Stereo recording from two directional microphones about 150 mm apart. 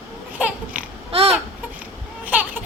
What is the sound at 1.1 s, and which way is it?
Babbling, 40° right (ahead or behind).